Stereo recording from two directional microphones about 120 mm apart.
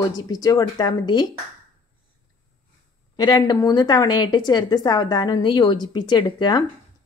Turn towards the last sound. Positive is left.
turn(degrees=40)  # may be behind; listen again after turning